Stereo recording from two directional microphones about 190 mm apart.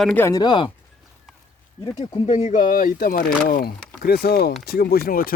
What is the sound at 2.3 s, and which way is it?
Speech, 40° left (ahead or behind).